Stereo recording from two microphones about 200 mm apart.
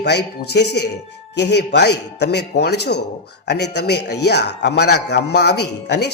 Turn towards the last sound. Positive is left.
turn(degrees=55)  # may be behind; listen again after turning